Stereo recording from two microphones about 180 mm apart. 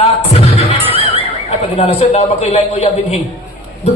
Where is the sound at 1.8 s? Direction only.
35° left (ahead or behind).